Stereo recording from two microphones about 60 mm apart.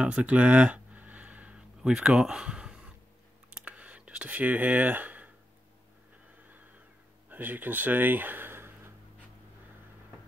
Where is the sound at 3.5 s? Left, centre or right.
Centre.